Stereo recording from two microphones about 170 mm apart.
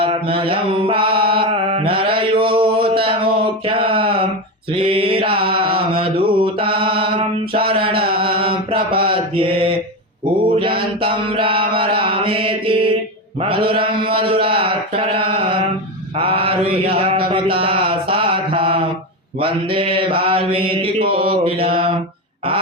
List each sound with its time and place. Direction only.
0.0 s mantra: 30° right (ahead or behind)